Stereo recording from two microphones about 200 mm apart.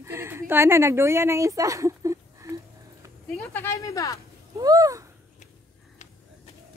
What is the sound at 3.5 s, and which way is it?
Speech, 15° left (ahead or behind).